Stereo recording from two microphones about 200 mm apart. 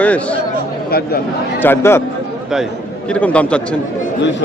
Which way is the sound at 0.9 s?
50° left (ahead or behind).